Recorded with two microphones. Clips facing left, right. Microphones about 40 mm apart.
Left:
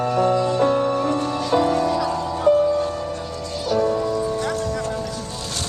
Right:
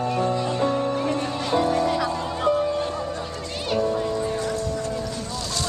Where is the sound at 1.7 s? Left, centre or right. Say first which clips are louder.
Left 2 dB; centre.